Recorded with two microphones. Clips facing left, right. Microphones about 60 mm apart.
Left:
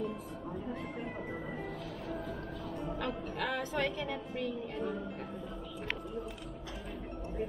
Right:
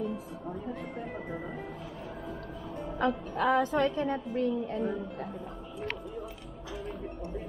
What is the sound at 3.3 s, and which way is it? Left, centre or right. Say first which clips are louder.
A woman's voice: right 9 dB; right.